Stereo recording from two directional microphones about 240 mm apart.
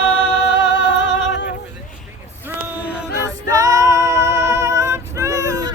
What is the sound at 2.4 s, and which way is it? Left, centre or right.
Music, centre.